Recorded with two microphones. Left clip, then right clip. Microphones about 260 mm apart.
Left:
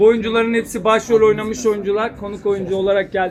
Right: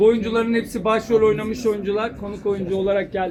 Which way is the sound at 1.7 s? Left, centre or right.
Centre.